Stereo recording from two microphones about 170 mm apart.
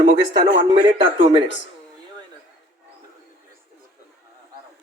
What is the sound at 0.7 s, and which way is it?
Speech, 35° right (ahead or behind).